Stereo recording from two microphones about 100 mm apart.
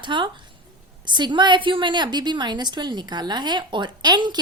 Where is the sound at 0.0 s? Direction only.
50° right (ahead or behind).